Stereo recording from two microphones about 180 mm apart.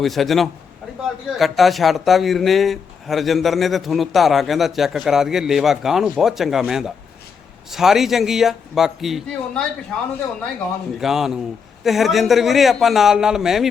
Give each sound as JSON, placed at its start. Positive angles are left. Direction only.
{"t": 0.0, "sound": "speech", "side_deg": 0}
{"t": 11.0, "sound": "speech", "side_deg": 0}